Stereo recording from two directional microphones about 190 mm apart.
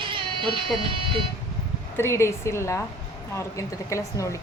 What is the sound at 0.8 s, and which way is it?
Speech, 25° right (ahead or behind).